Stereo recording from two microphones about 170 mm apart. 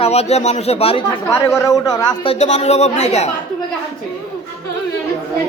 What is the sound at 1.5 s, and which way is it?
Speech, 20° left (ahead or behind).